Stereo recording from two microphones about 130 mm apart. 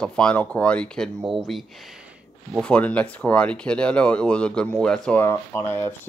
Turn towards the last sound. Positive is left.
turn(degrees=15)  # may be behind; listen again after turning